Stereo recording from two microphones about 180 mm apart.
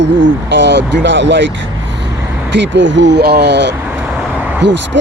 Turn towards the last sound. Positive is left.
turn(degrees=-80)